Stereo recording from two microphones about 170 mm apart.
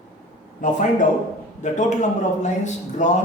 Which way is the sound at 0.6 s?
50° left (ahead or behind).